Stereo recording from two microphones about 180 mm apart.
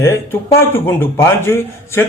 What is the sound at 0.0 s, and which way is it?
Speech, 10° left (ahead or behind).